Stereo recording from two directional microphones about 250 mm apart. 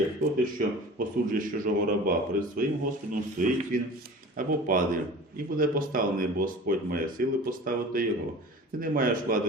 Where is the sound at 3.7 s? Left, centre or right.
Right.